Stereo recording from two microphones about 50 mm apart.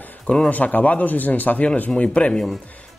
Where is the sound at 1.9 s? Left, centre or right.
Left.